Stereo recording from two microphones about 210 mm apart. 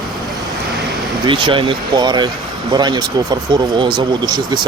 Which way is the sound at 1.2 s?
25° right (ahead or behind).